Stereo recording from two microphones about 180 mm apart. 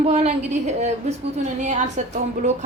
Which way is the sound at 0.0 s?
35° right (ahead or behind).